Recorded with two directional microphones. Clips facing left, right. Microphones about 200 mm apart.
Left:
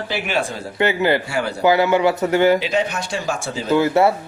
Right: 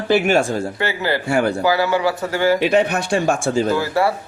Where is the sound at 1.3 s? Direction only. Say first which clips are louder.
Right 6 dB; 50° right (ahead or behind).